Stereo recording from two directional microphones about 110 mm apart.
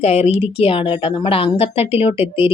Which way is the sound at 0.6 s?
60° left (ahead or behind).